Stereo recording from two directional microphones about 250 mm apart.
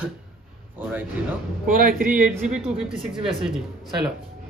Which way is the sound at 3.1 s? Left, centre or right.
Right.